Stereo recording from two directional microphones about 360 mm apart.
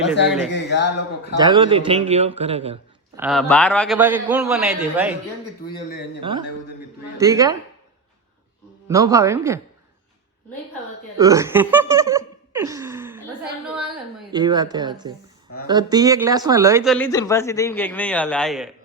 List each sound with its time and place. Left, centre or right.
0.5 s speech: left
1.4 s a man's voice: centre
3.2 s speech: centre
6.1 s a man's voice: centre
8.9 s a man's voice: centre
11.2 s a man's voice: centre